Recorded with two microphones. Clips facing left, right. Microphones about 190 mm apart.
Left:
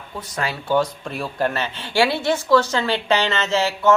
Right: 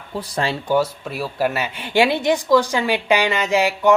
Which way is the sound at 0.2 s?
30° right (ahead or behind).